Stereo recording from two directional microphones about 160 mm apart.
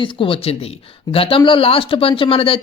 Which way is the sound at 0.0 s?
35° left (ahead or behind).